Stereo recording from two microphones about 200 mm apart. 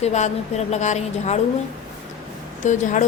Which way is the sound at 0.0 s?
35° left (ahead or behind).